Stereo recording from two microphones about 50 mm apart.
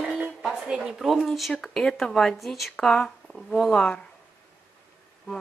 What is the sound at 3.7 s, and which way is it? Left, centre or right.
Speech, left.